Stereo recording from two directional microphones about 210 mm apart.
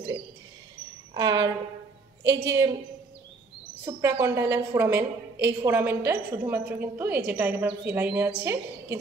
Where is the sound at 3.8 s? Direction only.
15° right (ahead or behind).